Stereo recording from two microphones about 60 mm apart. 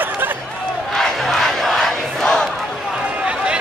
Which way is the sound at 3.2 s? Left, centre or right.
Centre.